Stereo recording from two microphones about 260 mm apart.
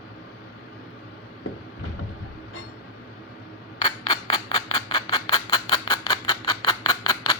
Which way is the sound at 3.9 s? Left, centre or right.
Centre.